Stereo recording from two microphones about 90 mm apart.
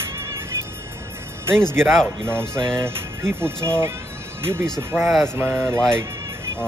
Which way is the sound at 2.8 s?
30° right (ahead or behind).